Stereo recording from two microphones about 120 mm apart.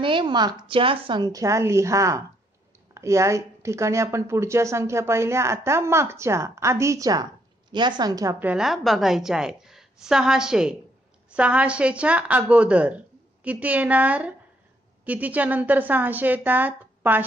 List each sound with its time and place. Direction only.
0.0 s a woman's voice: 45° right (ahead or behind)
8.4 s a woman's voice: 15° right (ahead or behind)
8.6 s a woman's voice: centre (ahead or behind); by 17.2 s 15° right (ahead or behind)